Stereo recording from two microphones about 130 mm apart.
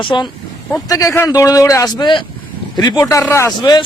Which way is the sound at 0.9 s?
25° left (ahead or behind).